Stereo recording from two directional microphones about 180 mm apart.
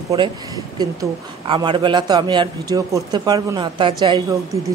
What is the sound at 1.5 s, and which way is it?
A man's voice, 25° right (ahead or behind).